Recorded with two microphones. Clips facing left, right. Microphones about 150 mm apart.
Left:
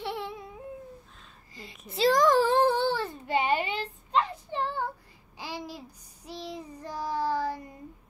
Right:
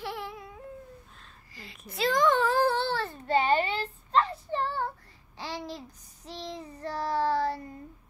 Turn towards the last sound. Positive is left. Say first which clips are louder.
# right 2 dB
turn(degrees=10)  # may be behind; listen again after turning